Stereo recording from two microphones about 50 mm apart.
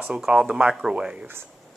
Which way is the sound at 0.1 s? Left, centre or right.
Centre.